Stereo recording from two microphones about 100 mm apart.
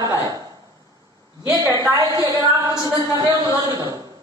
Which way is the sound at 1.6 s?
35° right (ahead or behind).